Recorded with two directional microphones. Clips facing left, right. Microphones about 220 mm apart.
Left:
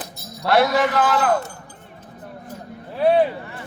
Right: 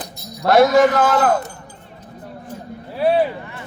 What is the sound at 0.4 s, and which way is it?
A man's voice, 45° right (ahead or behind).